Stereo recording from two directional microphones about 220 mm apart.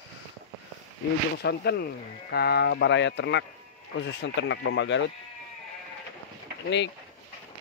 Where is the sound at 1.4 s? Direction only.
50° left (ahead or behind).